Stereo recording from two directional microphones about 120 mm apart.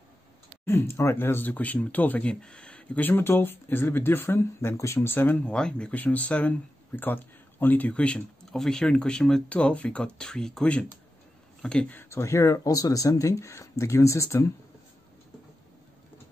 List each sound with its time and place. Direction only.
0.7 s speech: 20° left (ahead or behind)